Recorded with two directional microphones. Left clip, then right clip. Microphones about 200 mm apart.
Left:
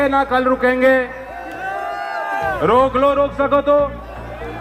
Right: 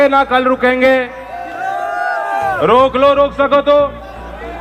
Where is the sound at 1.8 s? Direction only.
40° right (ahead or behind).